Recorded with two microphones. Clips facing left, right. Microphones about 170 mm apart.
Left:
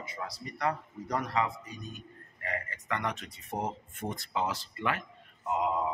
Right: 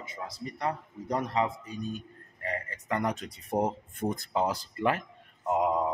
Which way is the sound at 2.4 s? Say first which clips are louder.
Right 2 dB; 35° right (ahead or behind).